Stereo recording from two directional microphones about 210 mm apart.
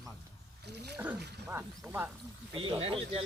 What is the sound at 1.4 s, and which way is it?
Snake, 10° right (ahead or behind).